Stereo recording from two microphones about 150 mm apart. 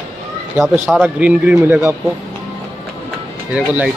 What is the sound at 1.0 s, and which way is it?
Speech, 10° right (ahead or behind).